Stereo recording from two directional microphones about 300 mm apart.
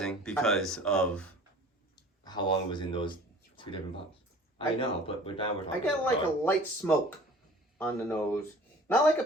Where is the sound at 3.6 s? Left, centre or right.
Centre.